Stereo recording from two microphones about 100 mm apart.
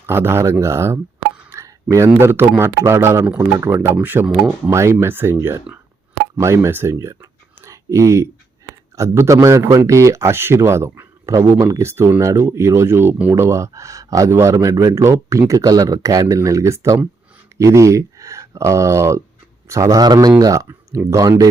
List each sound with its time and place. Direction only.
0.0 s a man's voice: 25° right (ahead or behind)
1.5 s a sound: 30° right (ahead or behind)
2.0 s a man's voice: 20° right (ahead or behind)
13.4 s speech: 30° right (ahead or behind)